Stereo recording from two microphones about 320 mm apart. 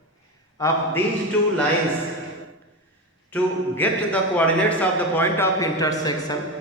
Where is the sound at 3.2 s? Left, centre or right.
Centre.